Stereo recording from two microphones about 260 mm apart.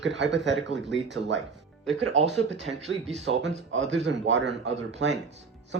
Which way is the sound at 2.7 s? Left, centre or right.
Right.